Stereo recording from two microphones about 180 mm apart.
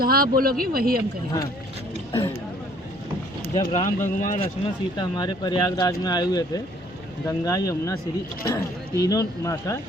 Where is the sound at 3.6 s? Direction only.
25° left (ahead or behind).